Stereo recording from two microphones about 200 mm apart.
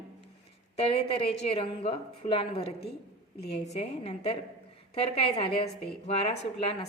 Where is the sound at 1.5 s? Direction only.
30° left (ahead or behind).